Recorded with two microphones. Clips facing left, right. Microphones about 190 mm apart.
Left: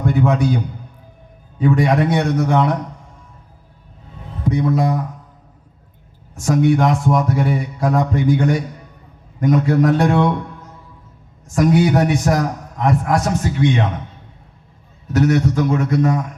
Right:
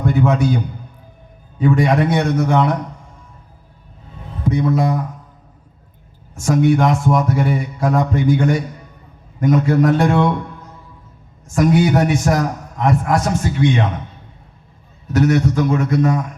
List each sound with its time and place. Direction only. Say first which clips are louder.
0.0 s a man's voice: even; 35° left (ahead or behind)
1.5 s speech: even; 35° left (ahead or behind)
4.4 s speech: even; 35° left (ahead or behind)
6.3 s speech: right 1 dB; 35° left (ahead or behind)
11.5 s speech: even; 35° left (ahead or behind)
15.1 s speech: even; 40° left (ahead or behind)